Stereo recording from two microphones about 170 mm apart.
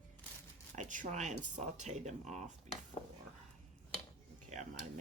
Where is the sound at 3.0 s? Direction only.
35° left (ahead or behind).